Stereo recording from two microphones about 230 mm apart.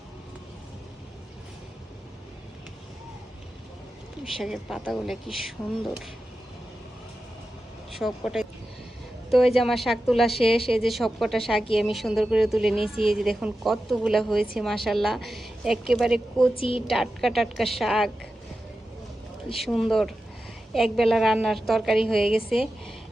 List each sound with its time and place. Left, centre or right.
4.2 s a woman's voice: centre
7.9 s a woman's voice: centre
16.6 s a woman's voice: left
16.9 s a woman's voice: centre
19.5 s a woman's voice: centre